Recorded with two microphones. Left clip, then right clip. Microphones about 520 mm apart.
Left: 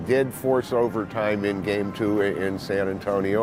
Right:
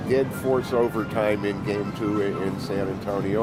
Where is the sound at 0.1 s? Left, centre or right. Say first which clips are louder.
Left 1 dB; left.